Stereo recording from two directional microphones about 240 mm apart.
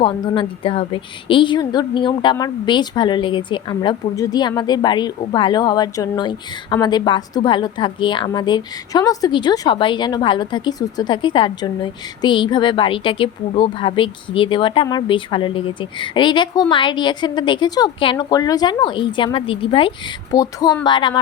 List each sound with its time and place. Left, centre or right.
0.0 s a woman's voice: left